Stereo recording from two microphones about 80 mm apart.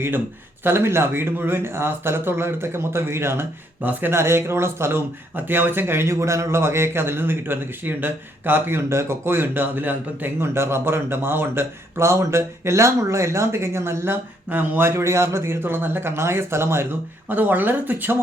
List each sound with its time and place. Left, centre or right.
0.6 s speech: right